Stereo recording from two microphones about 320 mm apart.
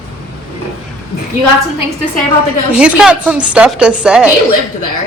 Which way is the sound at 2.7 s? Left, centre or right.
Centre.